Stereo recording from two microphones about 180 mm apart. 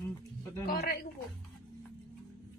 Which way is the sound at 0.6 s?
60° left (ahead or behind).